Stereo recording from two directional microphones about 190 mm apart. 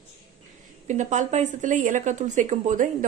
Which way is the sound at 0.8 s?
40° right (ahead or behind).